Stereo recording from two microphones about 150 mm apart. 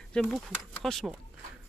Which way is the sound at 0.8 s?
Centre (ahead or behind).